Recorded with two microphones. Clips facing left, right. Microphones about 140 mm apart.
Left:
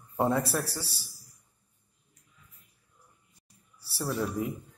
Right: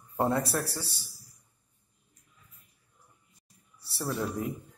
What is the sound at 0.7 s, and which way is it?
Speech, 35° left (ahead or behind).